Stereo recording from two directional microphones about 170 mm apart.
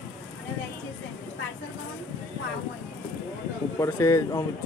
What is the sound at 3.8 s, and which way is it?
Speech, 15° left (ahead or behind).